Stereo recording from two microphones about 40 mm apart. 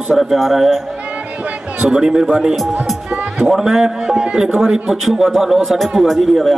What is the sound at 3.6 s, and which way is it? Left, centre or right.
A man's voice, centre.